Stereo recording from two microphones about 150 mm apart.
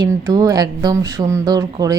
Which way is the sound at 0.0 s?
25° right (ahead or behind).